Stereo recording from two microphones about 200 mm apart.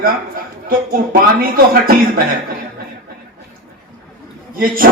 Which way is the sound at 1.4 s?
45° right (ahead or behind).